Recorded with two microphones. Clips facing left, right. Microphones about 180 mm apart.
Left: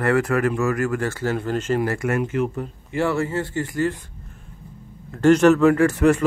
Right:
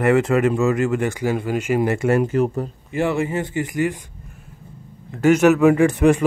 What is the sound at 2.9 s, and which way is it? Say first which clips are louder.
A man's voice: right 1 dB; 15° right (ahead or behind).